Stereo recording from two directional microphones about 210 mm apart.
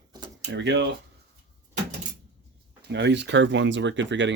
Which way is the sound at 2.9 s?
55° right (ahead or behind).